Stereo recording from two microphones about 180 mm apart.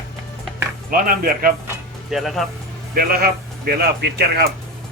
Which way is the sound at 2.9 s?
55° right (ahead or behind).